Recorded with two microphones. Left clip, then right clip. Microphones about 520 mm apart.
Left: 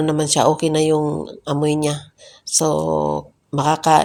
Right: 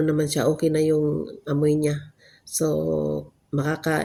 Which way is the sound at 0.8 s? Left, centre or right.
Centre.